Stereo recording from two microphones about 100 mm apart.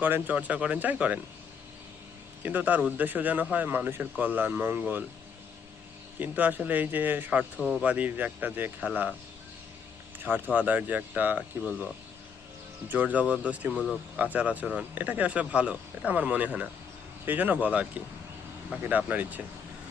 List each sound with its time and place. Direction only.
0.0 s speech: 15° right (ahead or behind)
2.4 s speech: 15° right (ahead or behind)
6.1 s speech: 15° right (ahead or behind)
10.2 s speech: 15° right (ahead or behind)
12.9 s speech: 15° right (ahead or behind)